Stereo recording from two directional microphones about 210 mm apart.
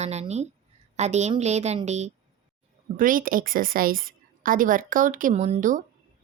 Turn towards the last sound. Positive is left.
turn(degrees=-35)  # may be behind; listen again after turning